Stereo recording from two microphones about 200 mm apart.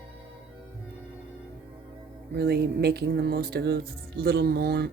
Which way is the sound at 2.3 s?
55° right (ahead or behind).